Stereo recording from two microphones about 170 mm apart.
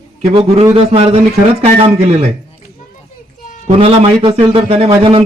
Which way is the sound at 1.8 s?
40° right (ahead or behind).